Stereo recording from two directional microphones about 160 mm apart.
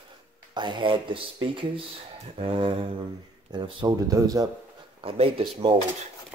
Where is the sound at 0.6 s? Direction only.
30° right (ahead or behind).